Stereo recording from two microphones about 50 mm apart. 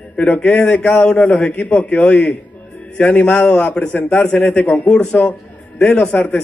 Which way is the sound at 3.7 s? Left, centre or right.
Left.